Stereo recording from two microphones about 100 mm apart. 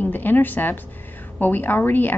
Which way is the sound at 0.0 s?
20° left (ahead or behind).